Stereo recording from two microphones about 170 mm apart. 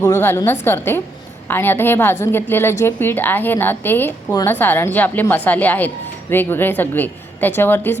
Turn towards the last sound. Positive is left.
turn(degrees=10)  # may be behind; listen again after turning